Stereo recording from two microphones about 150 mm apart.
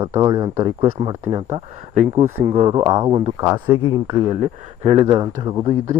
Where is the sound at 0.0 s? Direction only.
30° right (ahead or behind).